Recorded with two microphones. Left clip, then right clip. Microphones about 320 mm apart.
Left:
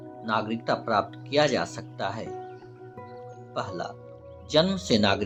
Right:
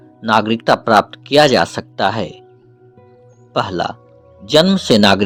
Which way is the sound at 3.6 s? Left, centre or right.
Right.